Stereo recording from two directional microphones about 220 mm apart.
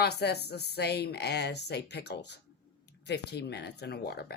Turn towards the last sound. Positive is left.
turn(degrees=45)  # may be behind; listen again after turning